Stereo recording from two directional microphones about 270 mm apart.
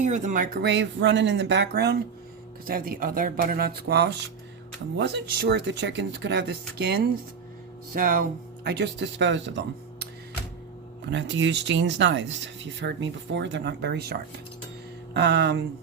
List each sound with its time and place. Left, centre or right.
0.0 s speech: right
7.9 s speech: right
11.1 s speech: right